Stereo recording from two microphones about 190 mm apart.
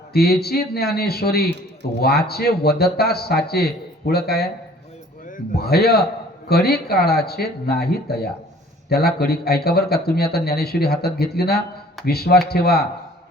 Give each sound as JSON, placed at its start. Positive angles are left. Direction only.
{"t": 0.1, "sound": "speech", "side_deg": 55}
{"t": 5.5, "sound": "speech", "side_deg": 55}